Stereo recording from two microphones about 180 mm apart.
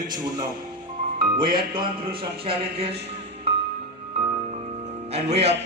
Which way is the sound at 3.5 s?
35° right (ahead or behind).